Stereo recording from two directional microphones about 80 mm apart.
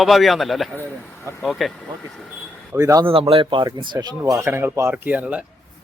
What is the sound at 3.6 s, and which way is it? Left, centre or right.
Speech, right.